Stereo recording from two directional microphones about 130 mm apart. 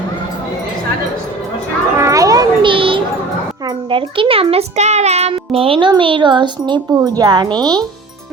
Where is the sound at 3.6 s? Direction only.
40° right (ahead or behind).